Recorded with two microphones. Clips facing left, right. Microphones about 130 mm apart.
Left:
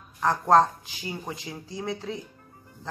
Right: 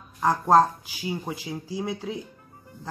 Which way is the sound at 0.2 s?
5° right (ahead or behind).